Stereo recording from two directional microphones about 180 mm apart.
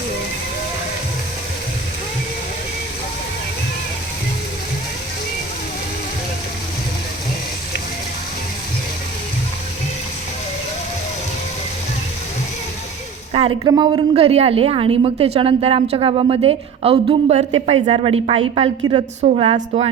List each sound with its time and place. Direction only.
13.3 s a woman's voice: 30° right (ahead or behind)
19.5 s a woman's voice: 40° right (ahead or behind)